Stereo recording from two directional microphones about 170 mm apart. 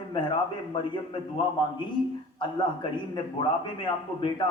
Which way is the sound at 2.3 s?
25° left (ahead or behind).